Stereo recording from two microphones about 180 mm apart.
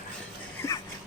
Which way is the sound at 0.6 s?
15° left (ahead or behind).